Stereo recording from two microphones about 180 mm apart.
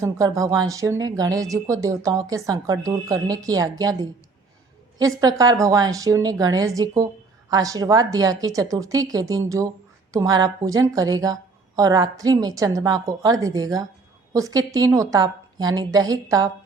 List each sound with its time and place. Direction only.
0.0 s speech: 20° right (ahead or behind)
5.2 s speech: 20° right (ahead or behind)